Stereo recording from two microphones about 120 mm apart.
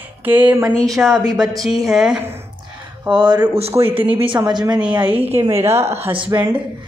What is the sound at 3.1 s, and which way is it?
Speech, 40° right (ahead or behind).